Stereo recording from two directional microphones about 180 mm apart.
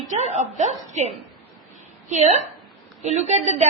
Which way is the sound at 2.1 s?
40° right (ahead or behind).